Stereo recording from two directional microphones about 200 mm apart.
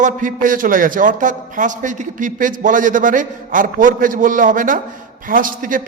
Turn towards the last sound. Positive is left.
turn(degrees=-45)  # may be behind; listen again after turning